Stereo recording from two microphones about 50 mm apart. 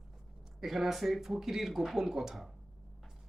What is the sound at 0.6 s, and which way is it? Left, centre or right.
Speech, centre.